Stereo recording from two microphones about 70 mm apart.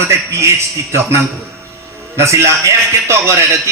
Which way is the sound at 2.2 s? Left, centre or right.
Right.